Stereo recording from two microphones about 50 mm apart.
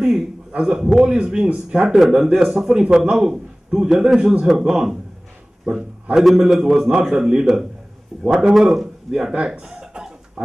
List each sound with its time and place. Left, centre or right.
0.5 s a man's voice: centre
5.7 s a man's voice: right
6.1 s a man's voice: centre
9.5 s a sound: centre